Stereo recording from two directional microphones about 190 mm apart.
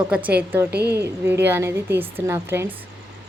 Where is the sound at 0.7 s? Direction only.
60° right (ahead or behind).